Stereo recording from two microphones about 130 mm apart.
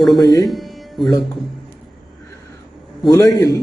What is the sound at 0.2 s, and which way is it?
Speech, 30° left (ahead or behind).